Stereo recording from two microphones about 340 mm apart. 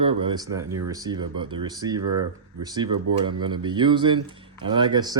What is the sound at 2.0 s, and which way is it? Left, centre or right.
Speech, right.